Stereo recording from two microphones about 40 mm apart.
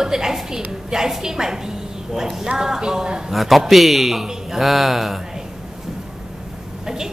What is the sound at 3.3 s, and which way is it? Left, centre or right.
A man's voice, centre.